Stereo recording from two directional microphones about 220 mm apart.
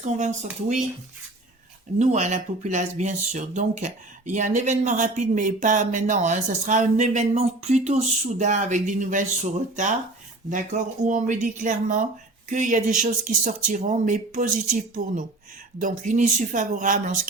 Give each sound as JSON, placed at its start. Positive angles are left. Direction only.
{"t": 0.0, "sound": "speech", "side_deg": -35}
{"t": 2.0, "sound": "speech", "side_deg": -30}